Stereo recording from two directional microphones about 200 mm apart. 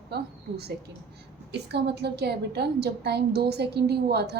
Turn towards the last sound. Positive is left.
turn(degrees=-55)  # may be behind; listen again after turning